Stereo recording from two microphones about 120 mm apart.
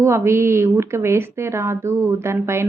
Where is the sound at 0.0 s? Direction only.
20° right (ahead or behind).